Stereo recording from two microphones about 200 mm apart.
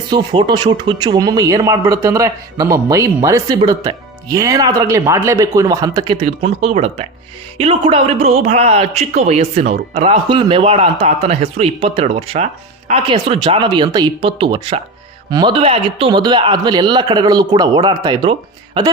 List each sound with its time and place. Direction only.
0.1 s speech: 20° right (ahead or behind)